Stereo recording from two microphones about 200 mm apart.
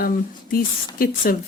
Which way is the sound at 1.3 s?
45° left (ahead or behind).